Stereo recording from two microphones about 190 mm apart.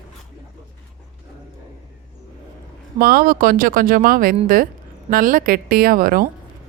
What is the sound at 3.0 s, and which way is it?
Speech, 50° right (ahead or behind).